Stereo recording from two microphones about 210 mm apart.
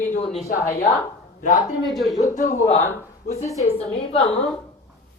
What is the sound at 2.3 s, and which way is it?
Speech, 35° left (ahead or behind).